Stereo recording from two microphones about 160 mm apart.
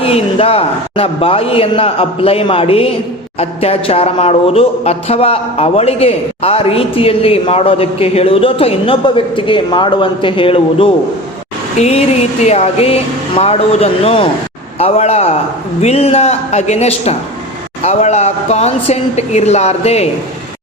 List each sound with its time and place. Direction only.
0.0 s a woman's voice: 35° left (ahead or behind)